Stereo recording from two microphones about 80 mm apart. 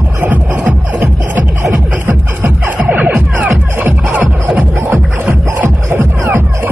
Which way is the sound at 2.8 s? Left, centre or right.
Centre.